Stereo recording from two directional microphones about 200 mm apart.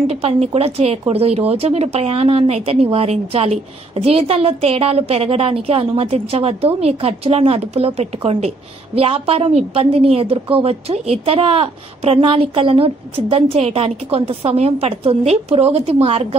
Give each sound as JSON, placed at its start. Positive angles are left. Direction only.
{"t": 0.1, "sound": "a woman's voice", "side_deg": -30}